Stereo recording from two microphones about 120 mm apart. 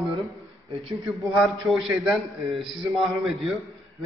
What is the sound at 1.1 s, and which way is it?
A man's voice, centre (ahead or behind).